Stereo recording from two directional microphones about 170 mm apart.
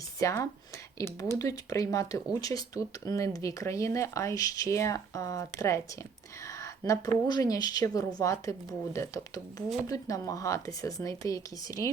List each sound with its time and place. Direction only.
0.2 s speech: 20° left (ahead or behind)